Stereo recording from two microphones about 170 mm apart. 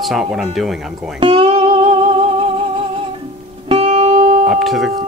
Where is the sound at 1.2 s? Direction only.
30° right (ahead or behind).